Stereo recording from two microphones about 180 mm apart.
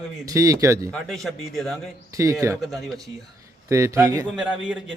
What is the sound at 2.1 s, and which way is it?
Speech, 15° right (ahead or behind).